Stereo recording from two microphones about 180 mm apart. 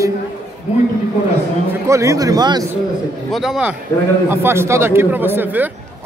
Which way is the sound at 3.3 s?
Centre (ahead or behind).